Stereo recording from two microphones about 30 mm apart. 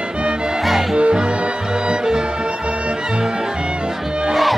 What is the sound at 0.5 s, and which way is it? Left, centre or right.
Music, centre.